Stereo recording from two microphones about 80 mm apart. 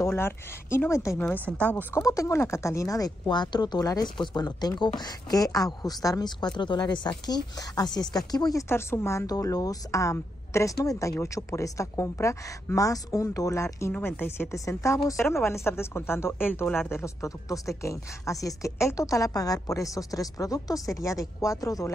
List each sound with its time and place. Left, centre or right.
0.0 s a woman's voice: left
1.6 s speech: centre
2.0 s a woman's voice: left
3.3 s speech: left
8.6 s a woman's voice: left
9.3 s a woman's voice: left
14.0 s speech: left
14.5 s a woman's voice: left